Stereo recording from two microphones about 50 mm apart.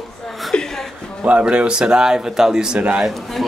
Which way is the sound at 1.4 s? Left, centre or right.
Centre.